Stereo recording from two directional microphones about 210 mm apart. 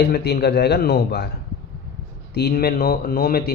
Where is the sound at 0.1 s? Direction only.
50° left (ahead or behind).